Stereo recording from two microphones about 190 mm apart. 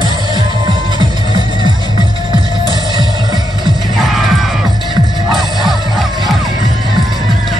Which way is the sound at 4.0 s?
Centre (ahead or behind).